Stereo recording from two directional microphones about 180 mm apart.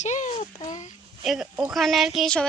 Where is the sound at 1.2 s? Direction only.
Centre (ahead or behind).